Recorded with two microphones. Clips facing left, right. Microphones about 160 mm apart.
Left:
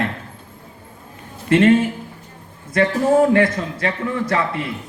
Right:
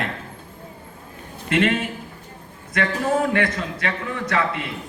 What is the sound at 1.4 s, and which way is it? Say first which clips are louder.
Speech: left 7 dB; 30° left (ahead or behind).